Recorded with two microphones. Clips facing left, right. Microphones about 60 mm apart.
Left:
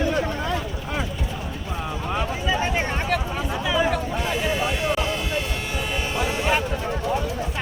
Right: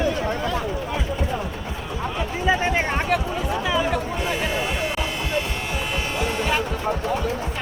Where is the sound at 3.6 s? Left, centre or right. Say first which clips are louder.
Left 2 dB; centre.